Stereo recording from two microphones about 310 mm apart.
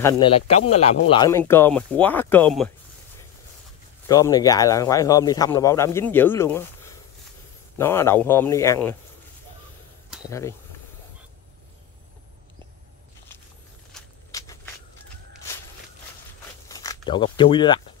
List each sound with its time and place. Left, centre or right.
0.0 s speech: centre
4.1 s speech: centre
10.2 s speech: centre
13.9 s vehicle: centre
16.6 s a sound: centre